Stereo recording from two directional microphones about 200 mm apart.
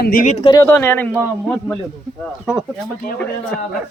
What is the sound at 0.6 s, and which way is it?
Speech, 10° left (ahead or behind).